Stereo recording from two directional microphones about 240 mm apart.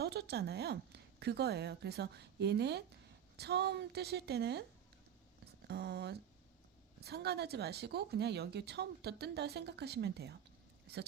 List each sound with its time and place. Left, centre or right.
0.0 s a woman's voice: right
5.6 s a woman's voice: right